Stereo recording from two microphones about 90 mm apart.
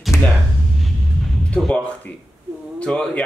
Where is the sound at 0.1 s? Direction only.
30° left (ahead or behind).